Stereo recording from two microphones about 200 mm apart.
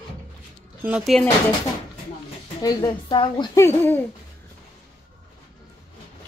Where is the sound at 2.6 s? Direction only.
20° left (ahead or behind).